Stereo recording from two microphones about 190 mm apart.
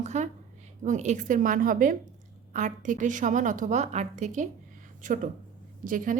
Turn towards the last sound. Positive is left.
turn(degrees=-45)  # may be behind; listen again after turning